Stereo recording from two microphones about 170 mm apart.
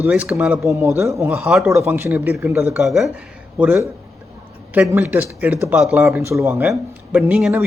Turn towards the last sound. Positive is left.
turn(degrees=-10)  # may be behind; listen again after turning